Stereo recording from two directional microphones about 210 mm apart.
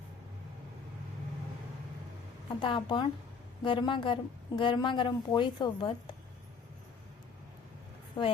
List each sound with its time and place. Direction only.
2.6 s a woman's voice: 20° left (ahead or behind)